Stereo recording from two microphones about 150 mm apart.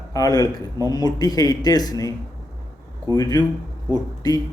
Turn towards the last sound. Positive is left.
turn(degrees=25)  # may be behind; listen again after turning